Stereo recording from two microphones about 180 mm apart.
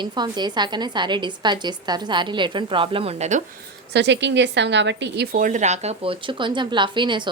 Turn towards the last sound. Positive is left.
turn(degrees=-25)  # may be behind; listen again after turning